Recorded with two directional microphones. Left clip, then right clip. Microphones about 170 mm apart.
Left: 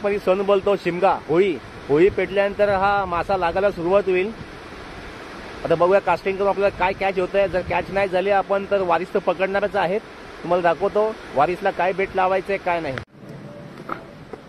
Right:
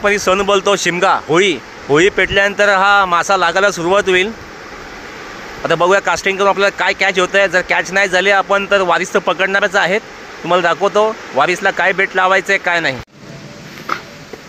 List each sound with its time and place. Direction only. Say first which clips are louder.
0.0 s speech: right 7 dB; 10° right (ahead or behind)
5.7 s speech: right 5 dB; 10° right (ahead or behind)